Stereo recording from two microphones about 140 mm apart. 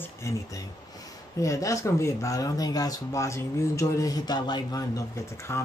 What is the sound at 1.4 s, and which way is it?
Speech, 25° left (ahead or behind).